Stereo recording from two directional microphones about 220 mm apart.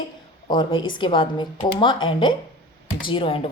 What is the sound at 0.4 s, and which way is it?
A woman's voice, 20° left (ahead or behind).